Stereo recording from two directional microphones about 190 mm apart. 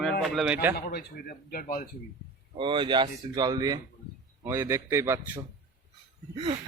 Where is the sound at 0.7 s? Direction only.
55° left (ahead or behind).